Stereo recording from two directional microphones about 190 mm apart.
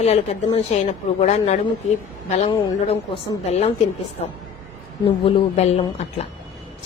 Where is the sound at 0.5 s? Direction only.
35° left (ahead or behind).